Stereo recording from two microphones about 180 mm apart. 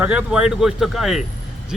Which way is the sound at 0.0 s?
5° right (ahead or behind).